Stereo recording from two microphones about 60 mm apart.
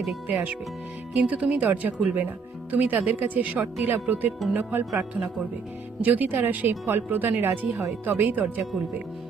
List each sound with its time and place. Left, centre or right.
0.3 s speech: right
6.0 s speech: right